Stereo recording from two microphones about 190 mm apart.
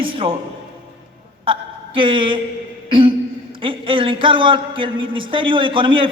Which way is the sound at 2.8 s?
25° right (ahead or behind).